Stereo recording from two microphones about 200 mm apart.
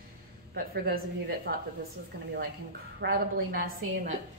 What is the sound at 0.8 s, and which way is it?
Speech, 50° right (ahead or behind).